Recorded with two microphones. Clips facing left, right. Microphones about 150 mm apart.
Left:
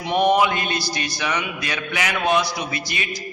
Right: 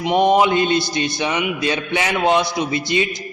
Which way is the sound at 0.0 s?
20° right (ahead or behind).